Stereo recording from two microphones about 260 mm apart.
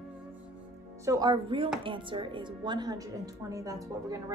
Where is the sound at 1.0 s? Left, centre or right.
Centre.